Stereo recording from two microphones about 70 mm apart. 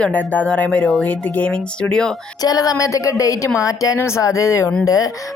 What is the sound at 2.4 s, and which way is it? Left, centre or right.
Speech, left.